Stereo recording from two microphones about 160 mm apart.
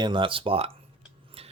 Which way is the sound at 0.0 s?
30° right (ahead or behind).